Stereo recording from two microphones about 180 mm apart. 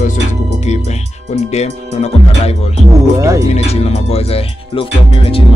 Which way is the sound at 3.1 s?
15° right (ahead or behind).